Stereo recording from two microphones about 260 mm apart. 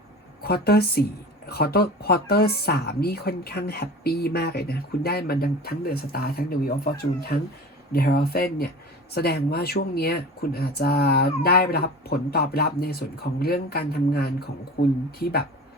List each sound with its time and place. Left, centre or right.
0.4 s speech: left